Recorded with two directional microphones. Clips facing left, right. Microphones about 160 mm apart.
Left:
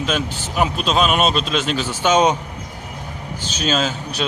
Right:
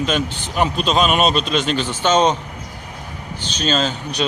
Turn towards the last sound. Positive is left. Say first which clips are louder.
# right 1 dB
turn(degrees=5)  # may be behind; listen again after turning